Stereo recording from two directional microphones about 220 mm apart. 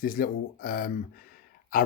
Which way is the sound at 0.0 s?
40° left (ahead or behind).